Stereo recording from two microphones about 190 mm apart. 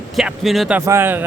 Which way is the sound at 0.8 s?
15° right (ahead or behind).